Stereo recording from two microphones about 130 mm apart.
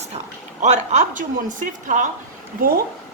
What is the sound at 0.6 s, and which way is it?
Speech, 70° right (ahead or behind).